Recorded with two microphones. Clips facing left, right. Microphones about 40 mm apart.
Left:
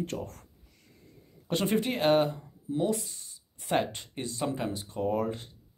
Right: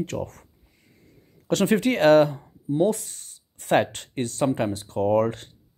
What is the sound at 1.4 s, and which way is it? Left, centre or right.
Speech, right.